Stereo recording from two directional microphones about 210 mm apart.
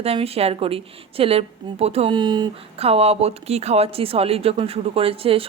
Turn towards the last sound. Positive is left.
turn(degrees=-25)  # may be behind; listen again after turning